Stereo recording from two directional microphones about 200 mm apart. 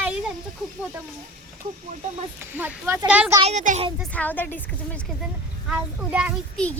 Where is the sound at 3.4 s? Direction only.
35° right (ahead or behind).